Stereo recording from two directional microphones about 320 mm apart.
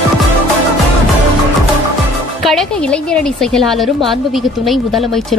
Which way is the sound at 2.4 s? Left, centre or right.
Centre.